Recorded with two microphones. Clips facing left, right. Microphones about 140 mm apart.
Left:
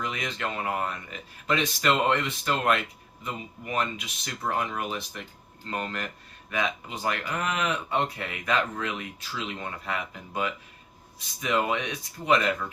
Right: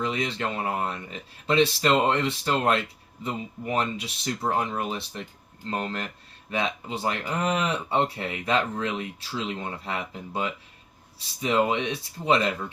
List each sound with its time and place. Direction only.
0.0 s speech: 30° right (ahead or behind)